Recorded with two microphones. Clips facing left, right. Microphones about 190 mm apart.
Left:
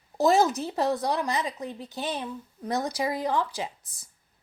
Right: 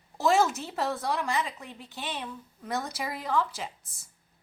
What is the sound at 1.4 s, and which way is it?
Speech, 35° left (ahead or behind).